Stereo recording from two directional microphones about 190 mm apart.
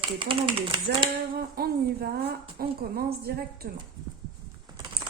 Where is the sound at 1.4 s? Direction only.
55° right (ahead or behind).